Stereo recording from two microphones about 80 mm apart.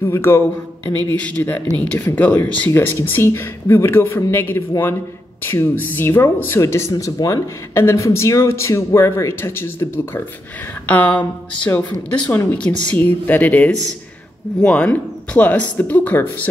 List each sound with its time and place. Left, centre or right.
0.0 s speech: left
1.2 s speech: centre
2.7 s speech: left
7.7 s speech: left
10.9 s speech: centre